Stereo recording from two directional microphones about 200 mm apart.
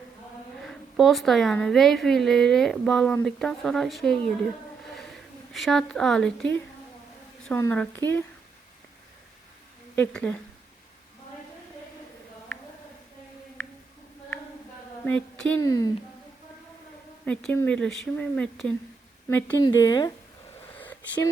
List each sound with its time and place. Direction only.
0.6 s a woman's voice: centre (ahead or behind)
4.9 s a sound: centre (ahead or behind)
7.4 s a woman's voice: 10° left (ahead or behind)
9.9 s speech: 5° left (ahead or behind)
15.0 s a woman's voice: 5° left (ahead or behind)
17.2 s a woman's voice: 10° left (ahead or behind)
20.7 s a sound: 10° left (ahead or behind)